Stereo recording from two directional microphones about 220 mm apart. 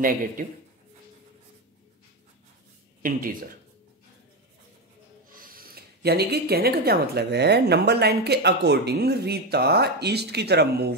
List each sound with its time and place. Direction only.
0.0 s speech: 40° right (ahead or behind)
3.0 s speech: 40° right (ahead or behind)
5.3 s speech: 40° right (ahead or behind)